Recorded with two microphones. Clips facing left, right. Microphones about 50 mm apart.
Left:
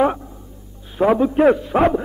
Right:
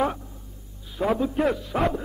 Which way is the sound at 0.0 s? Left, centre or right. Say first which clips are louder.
Left 7 dB; left.